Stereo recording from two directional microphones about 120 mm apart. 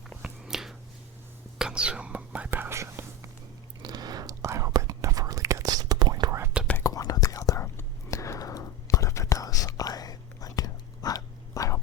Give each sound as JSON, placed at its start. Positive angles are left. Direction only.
{"t": 0.1, "sound": "a sound", "side_deg": -5}
{"t": 1.5, "sound": "whispering", "side_deg": -5}
{"t": 6.8, "sound": "whispering", "side_deg": 30}